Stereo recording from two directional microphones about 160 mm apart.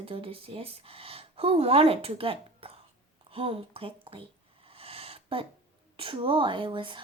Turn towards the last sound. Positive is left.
turn(degrees=-30)  # may be behind; listen again after turning